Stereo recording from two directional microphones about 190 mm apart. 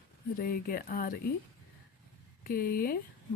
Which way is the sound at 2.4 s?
50° left (ahead or behind).